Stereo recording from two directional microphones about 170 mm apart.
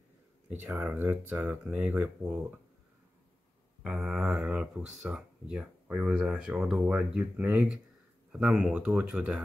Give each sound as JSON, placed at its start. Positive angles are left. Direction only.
{"t": 0.5, "sound": "speech", "side_deg": -10}
{"t": 3.8, "sound": "speech", "side_deg": 0}